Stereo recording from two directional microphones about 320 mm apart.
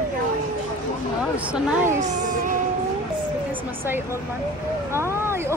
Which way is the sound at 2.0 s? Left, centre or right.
Right.